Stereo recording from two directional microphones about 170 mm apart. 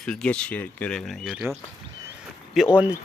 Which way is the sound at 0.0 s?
5° left (ahead or behind).